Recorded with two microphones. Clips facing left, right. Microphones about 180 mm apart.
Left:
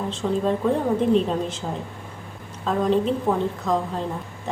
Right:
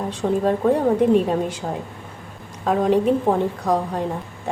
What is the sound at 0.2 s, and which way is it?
Speech, 35° right (ahead or behind).